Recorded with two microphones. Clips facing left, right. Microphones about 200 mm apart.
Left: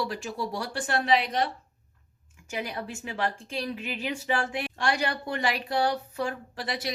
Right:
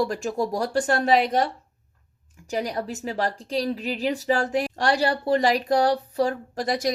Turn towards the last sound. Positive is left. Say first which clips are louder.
# right 8 dB
turn(degrees=-45)  # may be behind; listen again after turning